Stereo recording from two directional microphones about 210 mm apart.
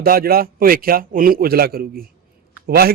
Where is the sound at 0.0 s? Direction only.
45° right (ahead or behind).